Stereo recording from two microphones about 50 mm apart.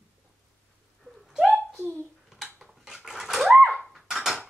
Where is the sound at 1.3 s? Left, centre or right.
Centre.